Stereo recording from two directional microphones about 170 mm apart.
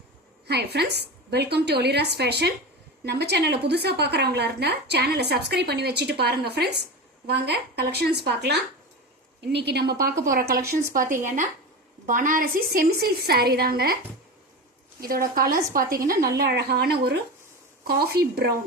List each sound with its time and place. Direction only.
0.4 s a woman's voice: 75° right (ahead or behind)
15.0 s a woman's voice: 60° right (ahead or behind)